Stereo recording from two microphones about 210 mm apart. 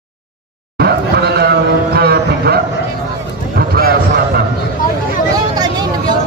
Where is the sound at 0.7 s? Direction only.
50° right (ahead or behind).